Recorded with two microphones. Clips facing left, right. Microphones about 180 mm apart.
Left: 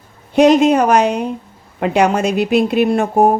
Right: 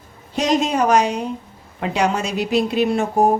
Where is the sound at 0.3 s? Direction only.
60° left (ahead or behind).